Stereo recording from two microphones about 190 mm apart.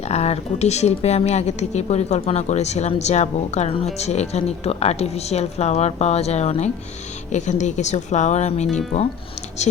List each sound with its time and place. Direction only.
0.0 s a woman's voice: 35° left (ahead or behind)